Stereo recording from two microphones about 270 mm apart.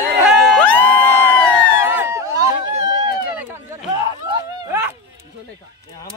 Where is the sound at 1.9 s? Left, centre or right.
Centre.